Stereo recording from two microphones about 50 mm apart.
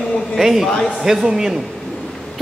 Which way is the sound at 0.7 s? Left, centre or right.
Centre.